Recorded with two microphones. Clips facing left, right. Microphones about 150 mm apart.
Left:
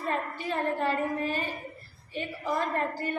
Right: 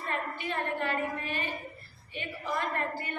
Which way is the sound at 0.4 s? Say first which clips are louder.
Left 5 dB; 40° left (ahead or behind).